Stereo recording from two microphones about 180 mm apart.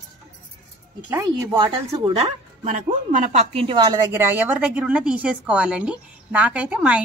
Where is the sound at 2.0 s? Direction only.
35° right (ahead or behind).